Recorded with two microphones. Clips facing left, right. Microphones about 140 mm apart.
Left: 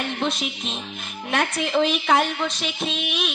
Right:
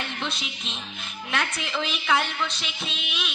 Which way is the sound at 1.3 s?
45° left (ahead or behind).